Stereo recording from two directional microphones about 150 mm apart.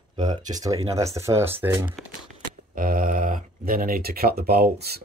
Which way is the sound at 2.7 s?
70° right (ahead or behind).